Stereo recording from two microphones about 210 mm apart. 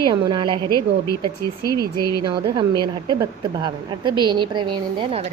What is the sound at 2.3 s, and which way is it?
A woman's voice, 20° right (ahead or behind).